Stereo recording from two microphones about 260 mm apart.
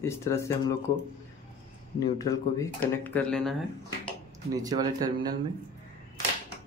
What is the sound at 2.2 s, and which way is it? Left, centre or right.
Speech, centre.